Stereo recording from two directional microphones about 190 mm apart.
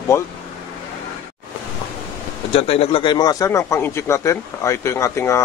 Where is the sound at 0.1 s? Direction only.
15° left (ahead or behind).